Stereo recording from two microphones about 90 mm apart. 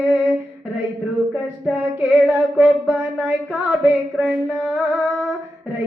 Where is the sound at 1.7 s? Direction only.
20° right (ahead or behind).